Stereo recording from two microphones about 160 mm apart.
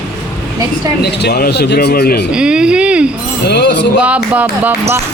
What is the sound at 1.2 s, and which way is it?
Speech, 80° left.